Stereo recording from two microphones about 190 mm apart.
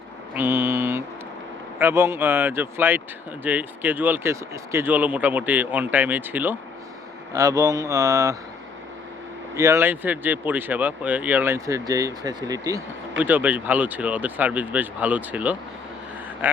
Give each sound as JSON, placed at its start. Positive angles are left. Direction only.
{"t": 0.3, "sound": "a sound", "side_deg": -10}
{"t": 1.8, "sound": "speech", "side_deg": -15}
{"t": 9.6, "sound": "speech", "side_deg": -15}